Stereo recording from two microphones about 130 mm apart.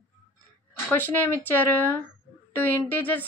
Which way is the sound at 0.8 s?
15° left (ahead or behind).